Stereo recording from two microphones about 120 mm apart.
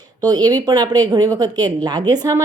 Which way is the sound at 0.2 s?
35° right (ahead or behind).